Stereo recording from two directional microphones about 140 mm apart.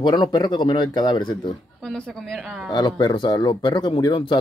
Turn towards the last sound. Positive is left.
turn(degrees=35)  # may be behind; listen again after turning